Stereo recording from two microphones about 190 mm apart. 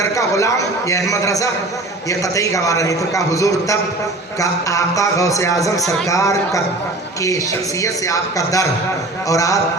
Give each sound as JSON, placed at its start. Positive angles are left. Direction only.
{"t": 0.0, "sound": "a man's voice", "side_deg": 15}
{"t": 7.8, "sound": "a man's voice", "side_deg": 15}